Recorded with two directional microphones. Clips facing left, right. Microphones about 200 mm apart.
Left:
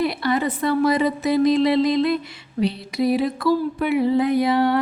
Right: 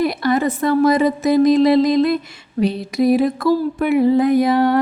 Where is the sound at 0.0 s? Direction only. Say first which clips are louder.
Right 4 dB; 45° right (ahead or behind).